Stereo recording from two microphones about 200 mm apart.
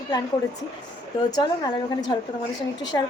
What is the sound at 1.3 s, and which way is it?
Speech, 20° left (ahead or behind).